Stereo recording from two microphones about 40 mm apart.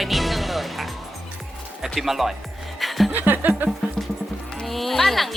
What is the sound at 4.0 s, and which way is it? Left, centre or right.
Music, centre.